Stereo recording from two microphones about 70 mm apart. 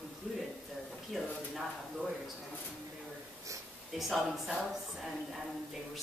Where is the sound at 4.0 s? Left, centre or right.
Centre.